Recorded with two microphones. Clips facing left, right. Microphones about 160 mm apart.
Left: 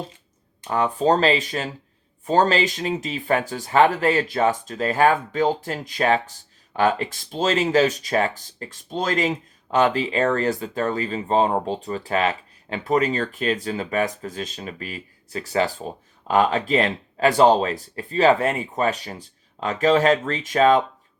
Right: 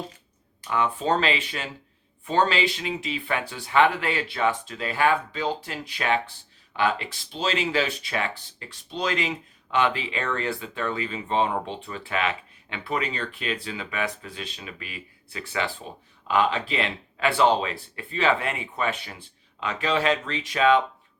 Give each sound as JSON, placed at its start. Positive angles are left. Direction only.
{"t": 0.7, "sound": "speech", "side_deg": 40}